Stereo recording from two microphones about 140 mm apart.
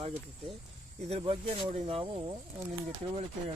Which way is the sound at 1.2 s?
45° right (ahead or behind).